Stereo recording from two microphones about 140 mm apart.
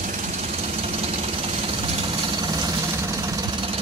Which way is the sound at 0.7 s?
45° right (ahead or behind).